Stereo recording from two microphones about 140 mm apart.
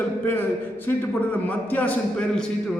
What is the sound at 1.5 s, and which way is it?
Speech, 10° left (ahead or behind).